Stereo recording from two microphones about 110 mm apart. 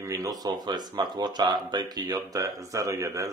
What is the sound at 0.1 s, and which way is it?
Speech, 35° right (ahead or behind).